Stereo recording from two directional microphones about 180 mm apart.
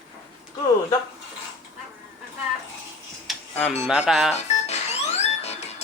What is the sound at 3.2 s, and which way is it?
Music, 10° left (ahead or behind).